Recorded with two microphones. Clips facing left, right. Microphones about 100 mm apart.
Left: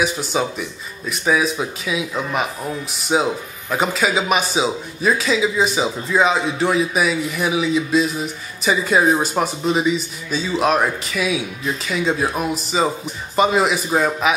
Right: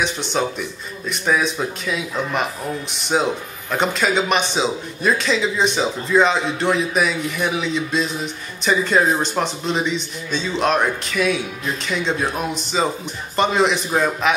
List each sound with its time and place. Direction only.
0.0 s speech: 5° left (ahead or behind)